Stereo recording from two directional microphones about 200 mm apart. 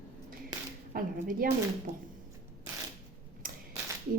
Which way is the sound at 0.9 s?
45° right (ahead or behind).